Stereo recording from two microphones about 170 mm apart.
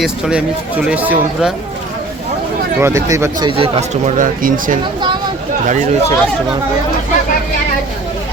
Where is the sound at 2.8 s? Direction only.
15° right (ahead or behind).